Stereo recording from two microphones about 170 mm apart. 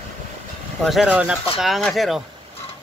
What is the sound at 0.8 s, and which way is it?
Speech, 5° right (ahead or behind).